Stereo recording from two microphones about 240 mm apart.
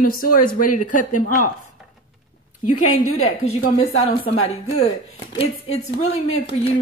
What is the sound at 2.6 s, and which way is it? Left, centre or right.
Speech, left.